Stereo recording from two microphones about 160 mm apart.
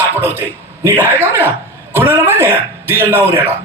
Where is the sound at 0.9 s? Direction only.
15° right (ahead or behind).